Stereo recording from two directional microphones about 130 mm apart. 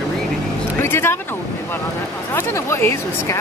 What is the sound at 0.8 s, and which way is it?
Speech, 20° left (ahead or behind).